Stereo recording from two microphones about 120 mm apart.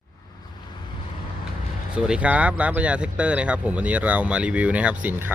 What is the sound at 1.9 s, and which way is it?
Speech, 10° right (ahead or behind).